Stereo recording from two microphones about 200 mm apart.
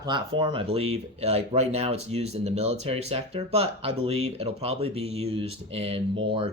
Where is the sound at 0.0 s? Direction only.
20° right (ahead or behind).